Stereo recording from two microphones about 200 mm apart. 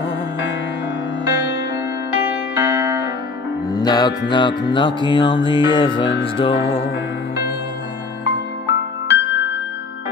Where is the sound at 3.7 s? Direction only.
20° left (ahead or behind).